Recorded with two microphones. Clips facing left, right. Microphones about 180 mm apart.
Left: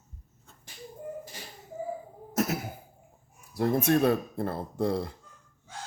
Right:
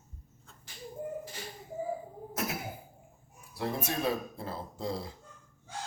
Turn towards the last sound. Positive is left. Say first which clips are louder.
# left 8 dB
turn(degrees=60)  # may be behind; listen again after turning